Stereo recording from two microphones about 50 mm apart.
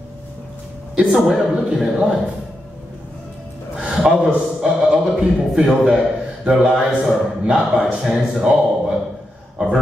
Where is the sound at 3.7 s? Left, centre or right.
Centre.